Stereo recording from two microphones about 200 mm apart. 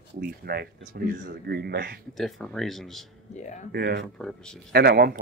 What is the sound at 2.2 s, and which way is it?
Speech, centre (ahead or behind).